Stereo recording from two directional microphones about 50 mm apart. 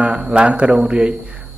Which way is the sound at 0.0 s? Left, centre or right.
Right.